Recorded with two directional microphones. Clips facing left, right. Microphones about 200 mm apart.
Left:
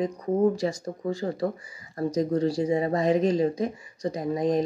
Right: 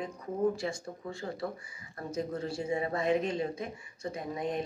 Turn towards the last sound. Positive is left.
turn(degrees=40)  # may be behind; listen again after turning